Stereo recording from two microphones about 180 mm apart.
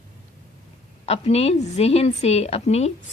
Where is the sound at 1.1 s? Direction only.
35° left (ahead or behind).